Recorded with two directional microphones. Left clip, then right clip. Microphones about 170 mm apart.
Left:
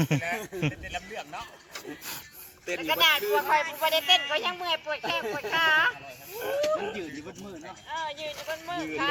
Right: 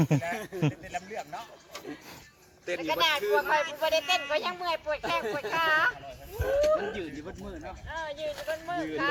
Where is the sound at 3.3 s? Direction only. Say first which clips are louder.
Left 1 dB; 45° right (ahead or behind).